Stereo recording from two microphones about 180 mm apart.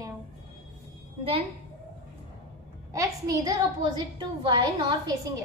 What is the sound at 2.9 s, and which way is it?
A woman's voice, 20° right (ahead or behind).